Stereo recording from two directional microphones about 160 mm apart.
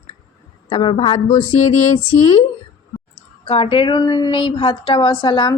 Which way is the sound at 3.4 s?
35° left (ahead or behind).